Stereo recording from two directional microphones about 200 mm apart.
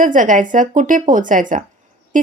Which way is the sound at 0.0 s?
40° right (ahead or behind).